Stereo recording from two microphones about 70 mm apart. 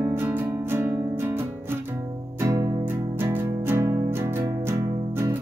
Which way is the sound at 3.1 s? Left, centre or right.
Right.